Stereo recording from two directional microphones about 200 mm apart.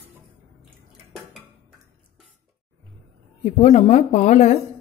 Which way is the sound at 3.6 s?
30° left (ahead or behind).